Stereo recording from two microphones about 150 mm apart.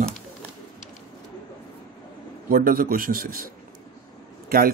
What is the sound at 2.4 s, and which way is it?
Speech, 70° right (ahead or behind).